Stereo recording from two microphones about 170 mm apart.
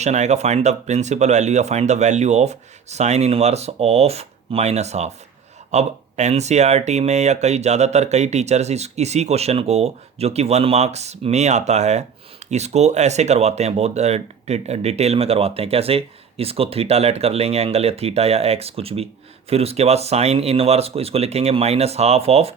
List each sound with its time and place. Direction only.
0.0 s speech: 40° right (ahead or behind)